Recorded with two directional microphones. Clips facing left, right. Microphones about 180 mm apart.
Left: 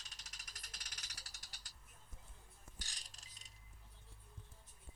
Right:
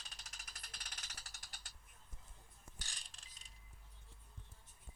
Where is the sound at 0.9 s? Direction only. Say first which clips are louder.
Right 3 dB; 55° right (ahead or behind).